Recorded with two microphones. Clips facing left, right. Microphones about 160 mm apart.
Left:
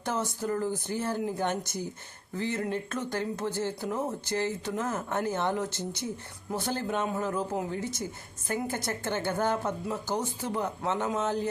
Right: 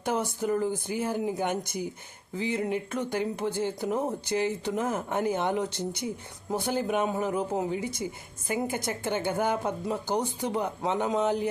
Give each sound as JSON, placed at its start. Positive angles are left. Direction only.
{"t": 0.0, "sound": "speech", "side_deg": -15}